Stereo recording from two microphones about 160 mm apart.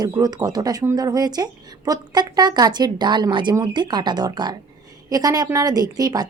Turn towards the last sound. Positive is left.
turn(degrees=-25)  # may be behind; listen again after turning